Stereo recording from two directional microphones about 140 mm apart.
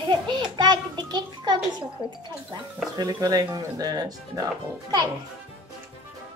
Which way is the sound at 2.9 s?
30° right (ahead or behind).